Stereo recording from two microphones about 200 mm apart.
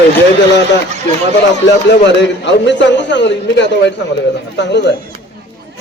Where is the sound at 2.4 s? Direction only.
60° left (ahead or behind).